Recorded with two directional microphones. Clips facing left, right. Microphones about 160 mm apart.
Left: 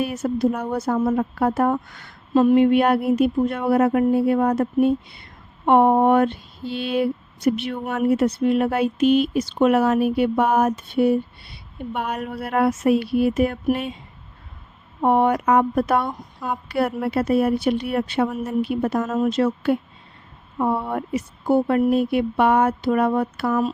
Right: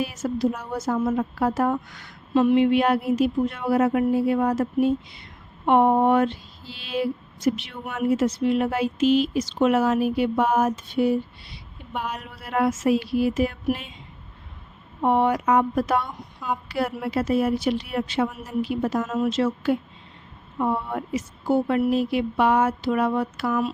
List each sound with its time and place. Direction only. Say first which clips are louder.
0.0 s speech: left 3 dB; 55° left (ahead or behind)
15.0 s speech: left 3 dB; 55° left (ahead or behind)
18.9 s speech: left 3 dB; 45° left (ahead or behind)